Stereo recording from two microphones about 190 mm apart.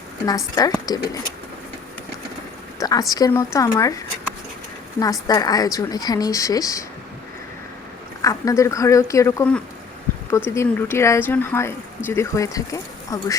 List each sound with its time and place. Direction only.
0.3 s a woman's voice: 20° left (ahead or behind)
2.7 s a sound: 20° left (ahead or behind)
3.1 s speech: 20° left (ahead or behind)
5.3 s a woman's voice: 20° left (ahead or behind)
8.2 s speech: 15° left (ahead or behind)